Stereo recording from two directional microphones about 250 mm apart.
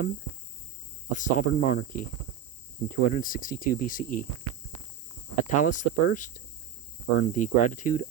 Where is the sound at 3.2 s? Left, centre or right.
Left.